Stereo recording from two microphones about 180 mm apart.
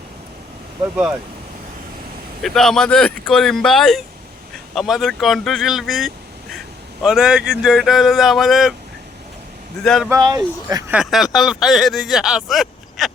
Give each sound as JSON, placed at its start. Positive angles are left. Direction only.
{"t": 2.4, "sound": "speech", "side_deg": 0}
{"t": 9.8, "sound": "speech", "side_deg": 0}
{"t": 10.1, "sound": "speech", "side_deg": -20}
{"t": 10.9, "sound": "speech", "side_deg": 0}